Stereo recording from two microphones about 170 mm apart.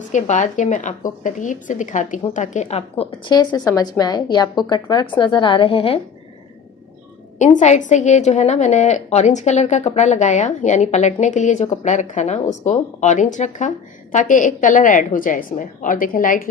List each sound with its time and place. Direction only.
0.1 s a woman's voice: 45° left (ahead or behind)
7.3 s a woman's voice: 45° left (ahead or behind)